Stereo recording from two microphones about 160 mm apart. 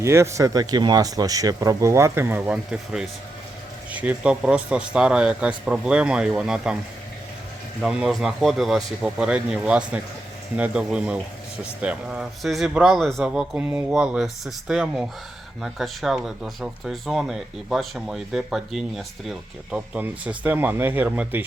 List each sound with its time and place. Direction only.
0.0 s speech: 15° right (ahead or behind)
3.9 s speech: 5° right (ahead or behind)
7.8 s speech: 5° right (ahead or behind)